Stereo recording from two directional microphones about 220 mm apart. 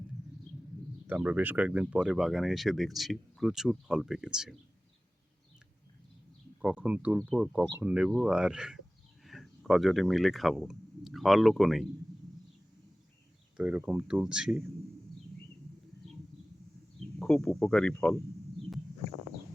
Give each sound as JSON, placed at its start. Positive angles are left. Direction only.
{"t": 1.0, "sound": "speech", "side_deg": -5}
{"t": 6.6, "sound": "speech", "side_deg": -5}
{"t": 13.6, "sound": "speech", "side_deg": -5}
{"t": 17.2, "sound": "speech", "side_deg": 5}